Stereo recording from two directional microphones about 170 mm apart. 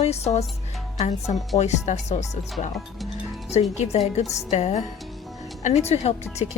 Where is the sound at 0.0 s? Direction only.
40° left (ahead or behind).